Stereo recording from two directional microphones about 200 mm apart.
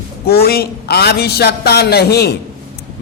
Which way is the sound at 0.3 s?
50° left (ahead or behind).